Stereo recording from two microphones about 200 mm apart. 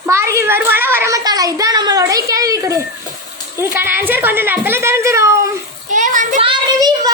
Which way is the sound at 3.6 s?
10° right (ahead or behind).